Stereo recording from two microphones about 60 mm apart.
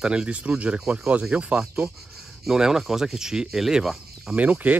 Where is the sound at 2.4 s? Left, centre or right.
Centre.